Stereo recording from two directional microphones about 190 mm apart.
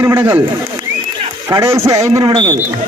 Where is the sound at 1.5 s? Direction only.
15° right (ahead or behind).